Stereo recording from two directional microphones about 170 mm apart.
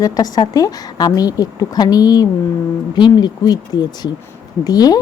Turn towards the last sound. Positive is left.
turn(degrees=20)  # may be behind; listen again after turning